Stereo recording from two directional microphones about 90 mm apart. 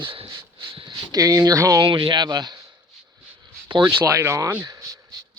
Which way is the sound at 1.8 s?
60° right (ahead or behind).